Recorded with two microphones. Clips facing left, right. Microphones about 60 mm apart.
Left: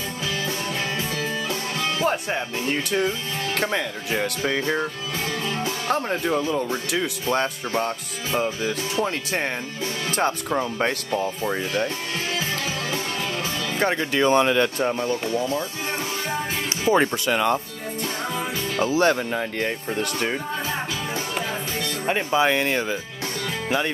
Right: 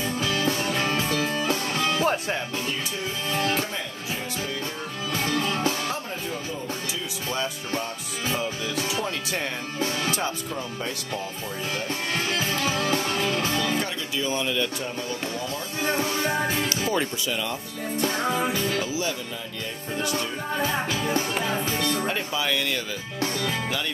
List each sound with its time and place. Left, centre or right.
0.2 s music: right
2.6 s speech: left
5.9 s speech: left
6.2 s speech: left
7.2 s music: left
10.1 s speech: left
14.1 s speech: left
15.3 s speech: left
16.6 s music: left
17.0 s speech: left
18.8 s speech: left
22.0 s speech: left